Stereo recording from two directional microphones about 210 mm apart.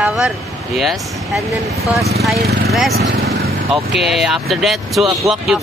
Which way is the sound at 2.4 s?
50° right (ahead or behind).